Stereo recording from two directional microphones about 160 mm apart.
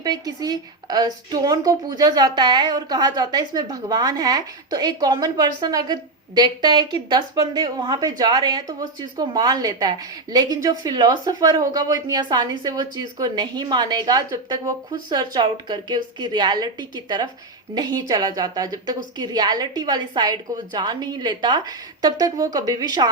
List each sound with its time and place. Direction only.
0.0 s a woman's voice: 25° right (ahead or behind)